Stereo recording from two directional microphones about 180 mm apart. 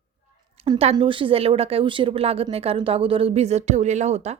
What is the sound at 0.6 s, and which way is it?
A woman's voice, 35° right (ahead or behind).